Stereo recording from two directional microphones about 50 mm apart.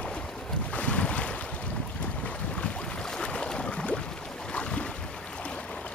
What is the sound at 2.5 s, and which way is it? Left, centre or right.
Boat, centre.